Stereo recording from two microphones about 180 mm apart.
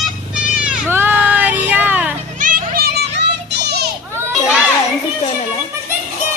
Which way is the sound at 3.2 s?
70° right (ahead or behind).